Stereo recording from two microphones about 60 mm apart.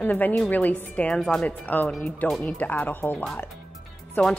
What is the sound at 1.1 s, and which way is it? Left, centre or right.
Speech, centre.